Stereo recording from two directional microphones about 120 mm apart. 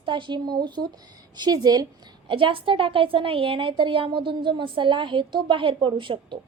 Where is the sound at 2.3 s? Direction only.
45° right (ahead or behind).